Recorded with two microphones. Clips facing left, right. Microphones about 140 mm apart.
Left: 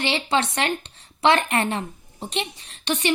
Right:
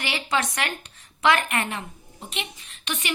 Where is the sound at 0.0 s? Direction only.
30° left (ahead or behind).